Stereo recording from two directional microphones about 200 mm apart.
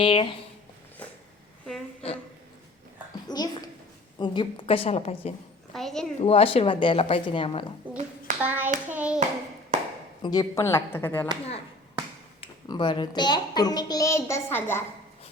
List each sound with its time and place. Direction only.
0.0 s a child's voice: 25° left (ahead or behind)
1.6 s a sound: 5° left (ahead or behind)
3.2 s a woman's voice: 20° left (ahead or behind)
5.7 s a woman's voice: centre (ahead or behind)
6.2 s a child's voice: 30° left (ahead or behind)
7.9 s hands: 5° right (ahead or behind)
9.0 s a woman's voice: 5° right (ahead or behind)
10.2 s speech: 15° left (ahead or behind)
12.4 s a child's voice: 25° left (ahead or behind)